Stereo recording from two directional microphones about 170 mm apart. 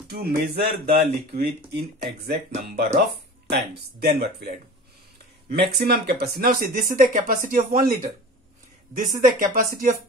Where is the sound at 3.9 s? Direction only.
70° right (ahead or behind).